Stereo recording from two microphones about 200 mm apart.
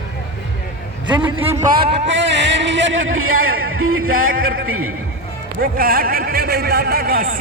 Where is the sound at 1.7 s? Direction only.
55° right (ahead or behind); by 4.9 s 90° right.